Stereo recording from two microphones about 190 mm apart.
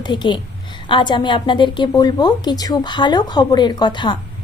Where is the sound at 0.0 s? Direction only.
25° left (ahead or behind).